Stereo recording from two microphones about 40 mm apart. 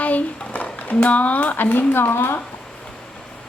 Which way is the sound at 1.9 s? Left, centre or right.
Left.